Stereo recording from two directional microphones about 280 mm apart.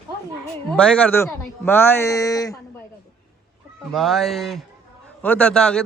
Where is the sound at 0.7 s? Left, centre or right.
Centre.